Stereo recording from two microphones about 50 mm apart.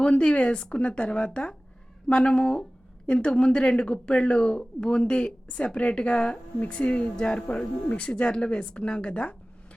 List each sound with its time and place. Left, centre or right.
0.0 s speech: left